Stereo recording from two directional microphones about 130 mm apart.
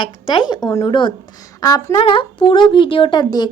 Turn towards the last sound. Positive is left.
turn(degrees=35)  # may be behind; listen again after turning